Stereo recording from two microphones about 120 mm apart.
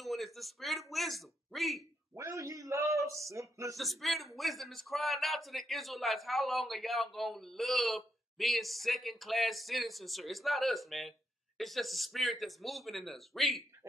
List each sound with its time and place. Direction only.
0.0 s a man's voice: centre (ahead or behind)
2.1 s a man's voice: 25° right (ahead or behind)
3.7 s a man's voice: centre (ahead or behind)